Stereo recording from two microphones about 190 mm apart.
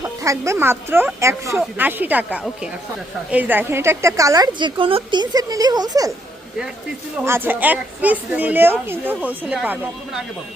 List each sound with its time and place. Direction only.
0.0 s a woman's voice: 15° right (ahead or behind)
7.3 s a woman's voice: 10° right (ahead or behind)